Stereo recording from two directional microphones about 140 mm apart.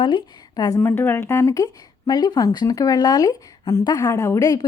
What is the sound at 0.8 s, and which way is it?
Speech, 15° left (ahead or behind).